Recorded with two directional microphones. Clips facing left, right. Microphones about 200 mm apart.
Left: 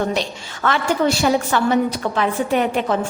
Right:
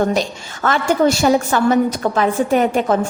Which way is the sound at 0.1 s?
45° right (ahead or behind).